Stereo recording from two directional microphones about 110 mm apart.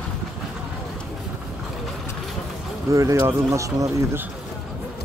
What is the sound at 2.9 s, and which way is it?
Speech, 30° right (ahead or behind).